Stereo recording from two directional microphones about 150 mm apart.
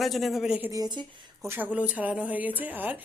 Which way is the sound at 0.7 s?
30° right (ahead or behind).